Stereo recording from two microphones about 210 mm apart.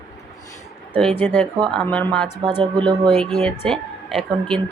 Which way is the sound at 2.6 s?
20° right (ahead or behind).